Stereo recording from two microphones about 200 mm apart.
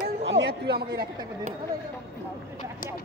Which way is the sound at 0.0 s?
60° right (ahead or behind).